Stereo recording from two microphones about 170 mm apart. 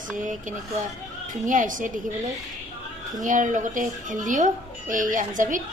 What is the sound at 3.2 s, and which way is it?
Speech, 50° right (ahead or behind).